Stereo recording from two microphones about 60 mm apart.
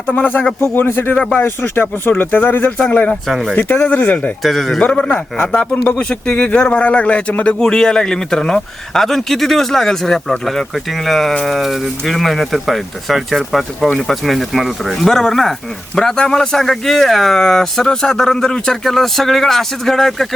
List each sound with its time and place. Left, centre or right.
0.1 s speech: left
3.2 s speech: centre
3.6 s speech: left
3.8 s speech: left
4.4 s speech: centre
4.8 s a man's voice: centre
5.5 s speech: left
6.0 s a man's voice: centre